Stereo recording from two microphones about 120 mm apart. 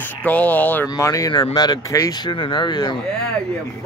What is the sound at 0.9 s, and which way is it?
Speech, 25° left (ahead or behind).